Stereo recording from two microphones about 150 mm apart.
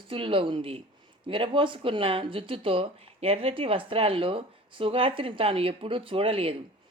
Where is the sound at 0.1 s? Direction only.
35° right (ahead or behind).